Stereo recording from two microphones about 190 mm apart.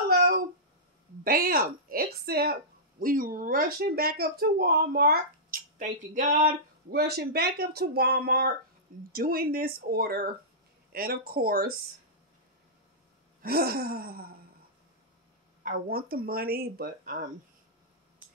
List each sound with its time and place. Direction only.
1.2 s speech: 50° right (ahead or behind)
13.4 s speech: 55° right (ahead or behind)
15.6 s speech: 50° right (ahead or behind)